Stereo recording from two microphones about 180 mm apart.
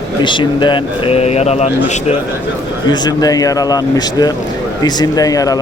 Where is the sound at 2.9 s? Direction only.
20° left (ahead or behind).